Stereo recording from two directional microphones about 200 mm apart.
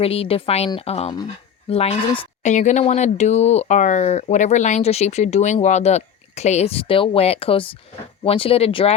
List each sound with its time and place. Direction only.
0.0 s a woman's voice: 30° left (ahead or behind)